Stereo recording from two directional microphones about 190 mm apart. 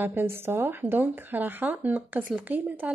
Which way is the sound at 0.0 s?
10° right (ahead or behind).